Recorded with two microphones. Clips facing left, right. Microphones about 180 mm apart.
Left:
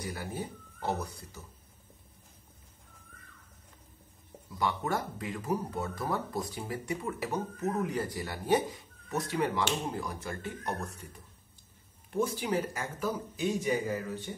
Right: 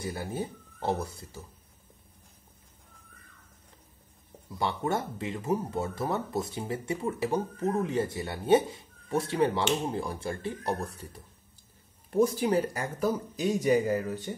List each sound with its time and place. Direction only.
0.0 s speech: 25° right (ahead or behind)
4.6 s speech: 25° right (ahead or behind)
12.1 s speech: 40° right (ahead or behind)